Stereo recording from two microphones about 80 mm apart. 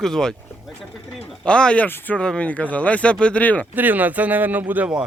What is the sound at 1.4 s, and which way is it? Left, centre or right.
Speech, centre.